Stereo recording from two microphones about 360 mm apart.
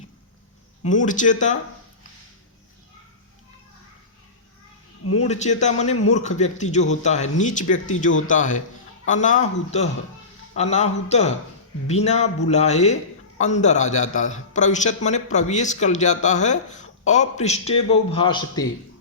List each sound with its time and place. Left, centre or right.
0.9 s a man's voice: left
5.2 s a man's voice: centre